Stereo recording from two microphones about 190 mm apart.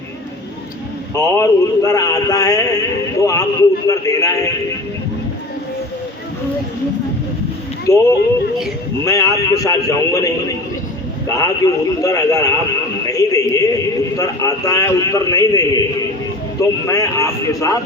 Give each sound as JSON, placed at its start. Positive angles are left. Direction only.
{"t": 1.1, "sound": "music", "side_deg": 15}
{"t": 7.9, "sound": "speech", "side_deg": 15}
{"t": 9.0, "sound": "music", "side_deg": 15}